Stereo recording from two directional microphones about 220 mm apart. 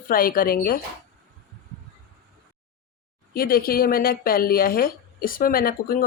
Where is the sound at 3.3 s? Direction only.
40° left (ahead or behind).